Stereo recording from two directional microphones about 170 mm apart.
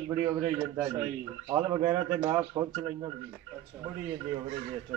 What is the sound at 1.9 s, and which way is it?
Speech, 15° right (ahead or behind).